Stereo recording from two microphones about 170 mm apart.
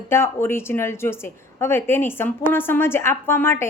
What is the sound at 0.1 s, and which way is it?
A woman's voice, 15° left (ahead or behind).